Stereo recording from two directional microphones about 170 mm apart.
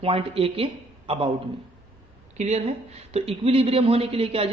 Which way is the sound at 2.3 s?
40° right (ahead or behind).